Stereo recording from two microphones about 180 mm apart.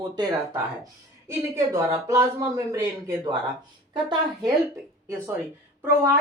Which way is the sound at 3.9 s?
25° right (ahead or behind).